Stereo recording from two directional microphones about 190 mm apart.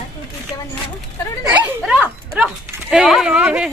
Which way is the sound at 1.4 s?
10° right (ahead or behind).